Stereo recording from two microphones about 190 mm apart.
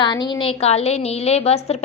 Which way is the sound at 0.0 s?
20° left (ahead or behind).